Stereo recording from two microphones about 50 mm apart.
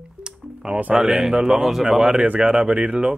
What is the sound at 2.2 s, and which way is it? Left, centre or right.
Speech, right.